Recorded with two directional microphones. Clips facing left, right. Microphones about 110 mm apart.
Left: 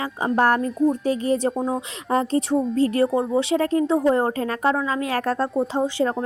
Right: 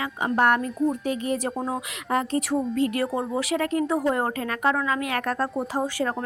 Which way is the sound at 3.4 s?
30° left (ahead or behind).